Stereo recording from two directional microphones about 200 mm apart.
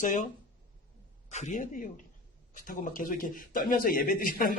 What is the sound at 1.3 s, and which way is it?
Speech, 35° left (ahead or behind).